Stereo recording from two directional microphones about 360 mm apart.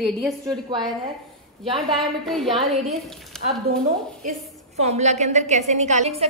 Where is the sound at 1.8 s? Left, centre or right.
Centre.